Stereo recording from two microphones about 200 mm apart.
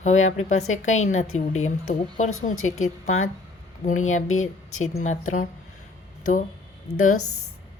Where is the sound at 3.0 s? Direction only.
35° left (ahead or behind).